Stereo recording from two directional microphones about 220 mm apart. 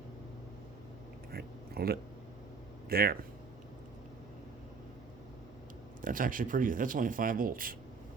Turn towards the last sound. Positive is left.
turn(degrees=-40)  # may be behind; listen again after turning